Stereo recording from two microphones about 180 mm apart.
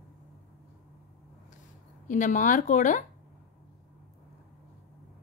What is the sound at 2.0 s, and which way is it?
A woman's voice, 45° left (ahead or behind).